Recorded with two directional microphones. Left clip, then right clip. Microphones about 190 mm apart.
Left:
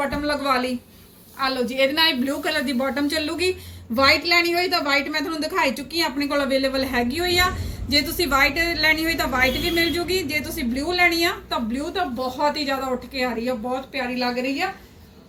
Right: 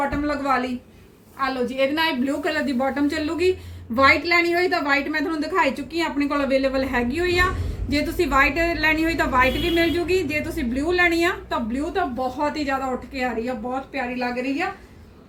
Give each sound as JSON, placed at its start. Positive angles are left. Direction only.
{"t": 0.0, "sound": "a woman's voice", "side_deg": 0}